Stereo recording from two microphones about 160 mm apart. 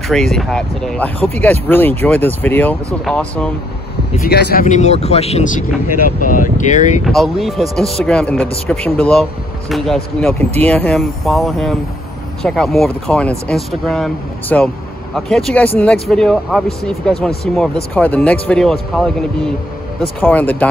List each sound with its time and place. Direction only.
0.1 s speech: 5° left (ahead or behind)
4.2 s speech: 90° left
4.6 s speech: 45° left (ahead or behind)
7.1 s speech: centre (ahead or behind)